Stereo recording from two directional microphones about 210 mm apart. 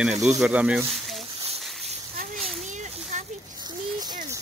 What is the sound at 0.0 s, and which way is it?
Speech, centre (ahead or behind).